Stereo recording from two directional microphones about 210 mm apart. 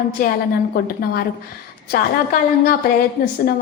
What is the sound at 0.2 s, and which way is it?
Speech, 45° left (ahead or behind).